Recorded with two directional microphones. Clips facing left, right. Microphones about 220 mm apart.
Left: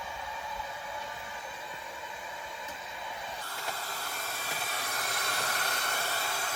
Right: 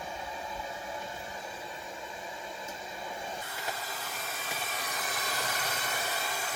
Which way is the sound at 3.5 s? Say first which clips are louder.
Right 1 dB; 5° right (ahead or behind).